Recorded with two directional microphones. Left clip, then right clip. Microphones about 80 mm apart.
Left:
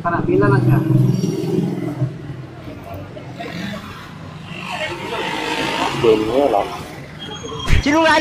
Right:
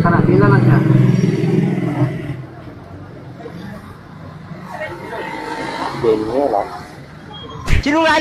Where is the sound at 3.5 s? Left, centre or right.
Centre.